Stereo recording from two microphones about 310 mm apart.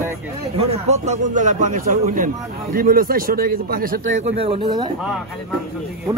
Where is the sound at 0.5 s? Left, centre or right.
Centre.